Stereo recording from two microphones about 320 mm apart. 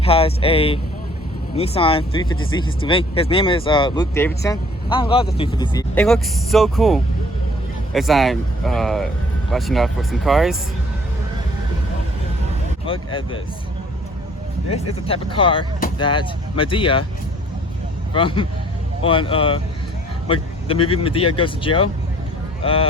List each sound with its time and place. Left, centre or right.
0.0 s speech: centre
15.0 s speech: centre
18.1 s speech: centre